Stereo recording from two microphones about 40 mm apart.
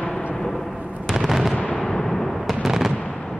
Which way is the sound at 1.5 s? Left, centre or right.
Left.